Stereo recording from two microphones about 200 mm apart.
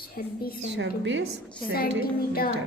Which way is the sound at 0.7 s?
65° right (ahead or behind).